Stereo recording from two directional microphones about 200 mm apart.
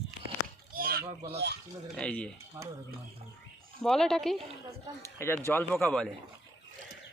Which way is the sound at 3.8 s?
Centre (ahead or behind).